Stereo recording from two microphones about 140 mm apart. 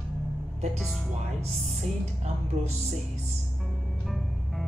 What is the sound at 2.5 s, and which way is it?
Music, 55° right (ahead or behind).